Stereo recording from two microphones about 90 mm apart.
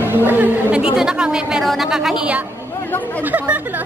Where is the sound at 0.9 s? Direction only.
10° right (ahead or behind).